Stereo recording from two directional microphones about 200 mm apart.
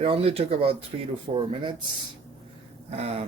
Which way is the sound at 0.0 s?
30° right (ahead or behind).